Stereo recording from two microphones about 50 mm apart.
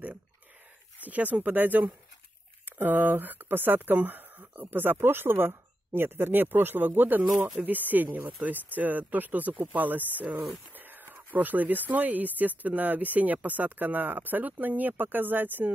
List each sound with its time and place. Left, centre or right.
1.0 s speech: right